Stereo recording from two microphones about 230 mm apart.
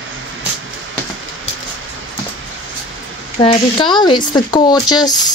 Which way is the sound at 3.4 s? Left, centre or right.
Left.